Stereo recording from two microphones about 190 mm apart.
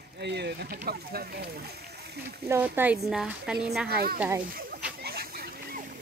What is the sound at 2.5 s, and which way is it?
Speech, 10° right (ahead or behind).